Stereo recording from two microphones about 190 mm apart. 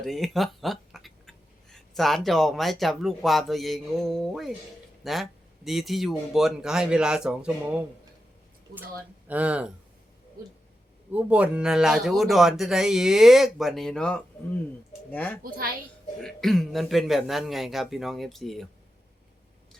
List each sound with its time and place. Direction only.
0.0 s speech: centre (ahead or behind)
9.2 s speech: 5° right (ahead or behind)
11.1 s a woman's voice: 10° right (ahead or behind); by 15.4 s 10° left (ahead or behind)
15.4 s a child's voice: 50° right (ahead or behind)
16.2 s speech: centre (ahead or behind)